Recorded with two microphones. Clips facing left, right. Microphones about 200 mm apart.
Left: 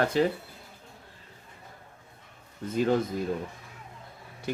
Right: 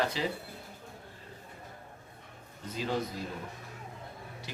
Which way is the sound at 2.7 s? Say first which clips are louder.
Left 9 dB; 50° left (ahead or behind).